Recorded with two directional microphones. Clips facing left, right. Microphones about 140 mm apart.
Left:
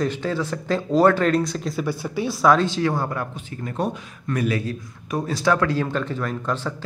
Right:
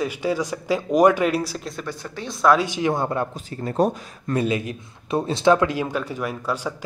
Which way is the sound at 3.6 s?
35° right (ahead or behind).